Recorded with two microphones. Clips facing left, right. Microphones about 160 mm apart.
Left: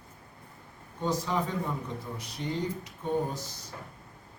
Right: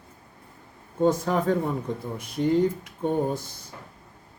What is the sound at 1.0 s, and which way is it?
Speech, 55° right (ahead or behind).